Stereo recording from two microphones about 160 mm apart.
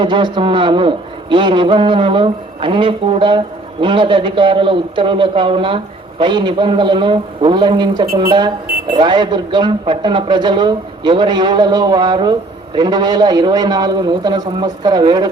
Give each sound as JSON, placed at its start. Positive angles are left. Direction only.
{"t": 0.0, "sound": "a man's voice", "side_deg": -30}